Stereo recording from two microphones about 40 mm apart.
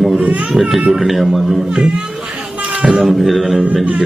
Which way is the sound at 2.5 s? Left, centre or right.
Right.